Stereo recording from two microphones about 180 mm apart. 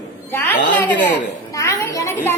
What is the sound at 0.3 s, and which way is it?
Speech, 10° left (ahead or behind).